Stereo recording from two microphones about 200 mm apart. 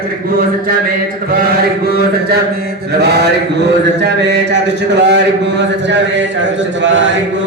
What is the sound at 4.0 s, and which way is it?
Speech, 60° right (ahead or behind).